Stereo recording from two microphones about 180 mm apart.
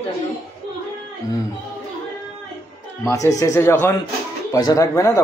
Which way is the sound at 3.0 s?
15° left (ahead or behind).